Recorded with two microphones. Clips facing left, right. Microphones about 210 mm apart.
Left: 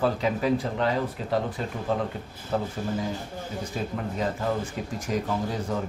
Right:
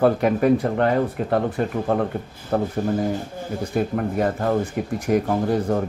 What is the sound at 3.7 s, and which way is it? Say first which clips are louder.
Speech: right 9 dB; 55° right (ahead or behind).